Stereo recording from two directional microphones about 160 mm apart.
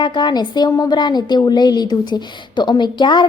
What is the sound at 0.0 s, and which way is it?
A woman's voice, 30° left (ahead or behind).